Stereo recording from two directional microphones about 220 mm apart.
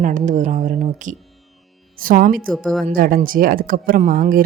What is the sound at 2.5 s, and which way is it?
Speech, 5° left (ahead or behind).